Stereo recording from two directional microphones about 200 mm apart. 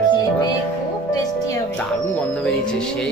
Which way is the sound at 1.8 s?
10° left (ahead or behind).